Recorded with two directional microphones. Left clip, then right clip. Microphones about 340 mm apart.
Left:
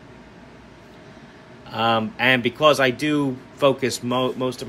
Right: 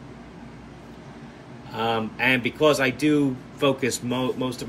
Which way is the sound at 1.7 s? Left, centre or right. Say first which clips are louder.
Left 5 dB; centre.